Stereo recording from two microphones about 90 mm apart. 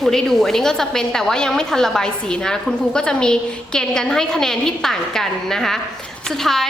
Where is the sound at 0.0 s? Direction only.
5° left (ahead or behind).